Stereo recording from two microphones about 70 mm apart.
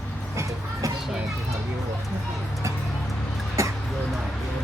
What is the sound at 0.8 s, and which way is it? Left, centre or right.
Speech, right.